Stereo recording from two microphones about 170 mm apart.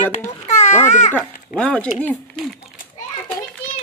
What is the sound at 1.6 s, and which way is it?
Speech, 5° left (ahead or behind).